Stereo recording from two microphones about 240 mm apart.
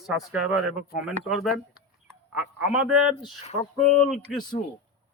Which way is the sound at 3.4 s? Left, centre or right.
Left.